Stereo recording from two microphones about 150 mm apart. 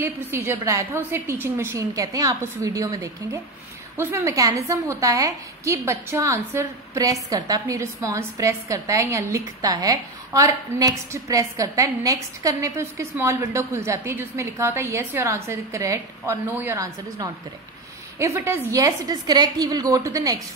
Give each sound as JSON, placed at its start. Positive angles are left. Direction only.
{"t": 0.0, "sound": "a woman's voice", "side_deg": -15}